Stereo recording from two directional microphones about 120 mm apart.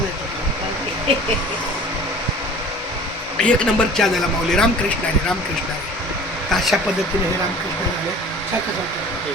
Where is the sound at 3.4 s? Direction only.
5° left (ahead or behind).